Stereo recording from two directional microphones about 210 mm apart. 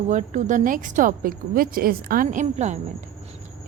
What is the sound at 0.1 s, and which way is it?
A woman's voice, 35° right (ahead or behind).